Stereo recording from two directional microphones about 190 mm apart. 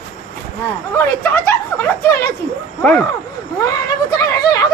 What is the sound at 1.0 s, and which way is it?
Speech, 10° left (ahead or behind).